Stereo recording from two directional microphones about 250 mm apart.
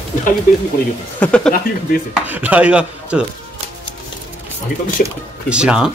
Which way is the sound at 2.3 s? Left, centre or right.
Centre.